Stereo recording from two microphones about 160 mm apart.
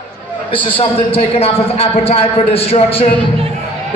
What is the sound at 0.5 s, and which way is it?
A man's voice, 30° left (ahead or behind).